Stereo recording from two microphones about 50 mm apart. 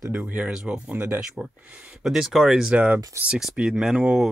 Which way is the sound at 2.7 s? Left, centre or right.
Right.